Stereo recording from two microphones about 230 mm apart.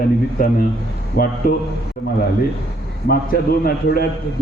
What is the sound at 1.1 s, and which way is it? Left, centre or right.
Speech, left.